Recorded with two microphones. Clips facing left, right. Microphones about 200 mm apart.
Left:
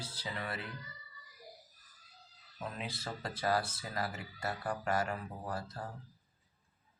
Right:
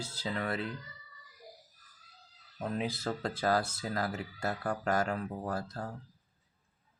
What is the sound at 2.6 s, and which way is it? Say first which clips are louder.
Speech: right 8 dB; 45° right (ahead or behind).